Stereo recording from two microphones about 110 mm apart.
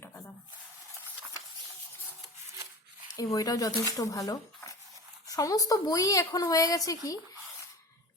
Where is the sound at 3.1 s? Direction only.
30° left (ahead or behind).